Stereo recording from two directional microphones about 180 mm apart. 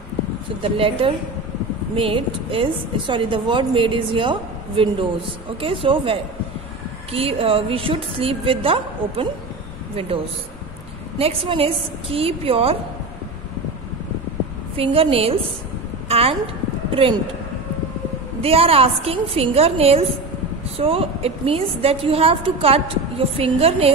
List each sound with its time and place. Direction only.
0.6 s a woman's voice: 30° right (ahead or behind)
14.8 s a woman's voice: 30° right (ahead or behind)
18.4 s a woman's voice: 35° right (ahead or behind)